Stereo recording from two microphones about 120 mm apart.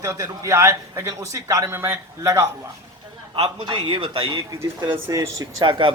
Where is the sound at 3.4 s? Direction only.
60° right (ahead or behind).